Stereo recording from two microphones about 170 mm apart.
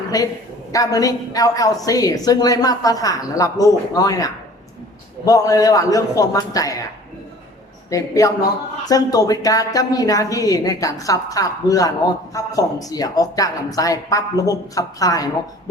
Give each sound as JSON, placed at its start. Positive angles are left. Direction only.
{"t": 0.1, "sound": "speech", "side_deg": 20}
{"t": 7.9, "sound": "speech", "side_deg": 20}